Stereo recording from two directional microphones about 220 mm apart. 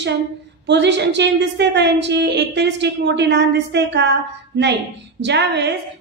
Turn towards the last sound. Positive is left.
turn(degrees=-50)  # may be behind; listen again after turning